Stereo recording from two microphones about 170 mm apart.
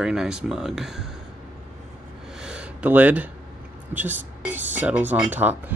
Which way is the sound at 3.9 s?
10° right (ahead or behind).